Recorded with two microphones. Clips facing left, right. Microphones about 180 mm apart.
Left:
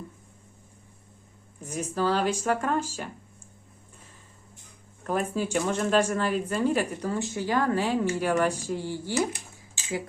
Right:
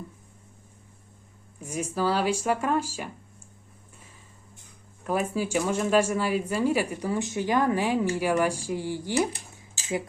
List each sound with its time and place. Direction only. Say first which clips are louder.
1.6 s speech: even; 10° right (ahead or behind)
5.0 s speech: right 1 dB; 10° right (ahead or behind)